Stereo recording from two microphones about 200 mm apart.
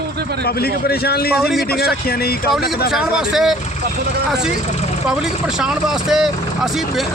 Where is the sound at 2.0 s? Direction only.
50° left (ahead or behind).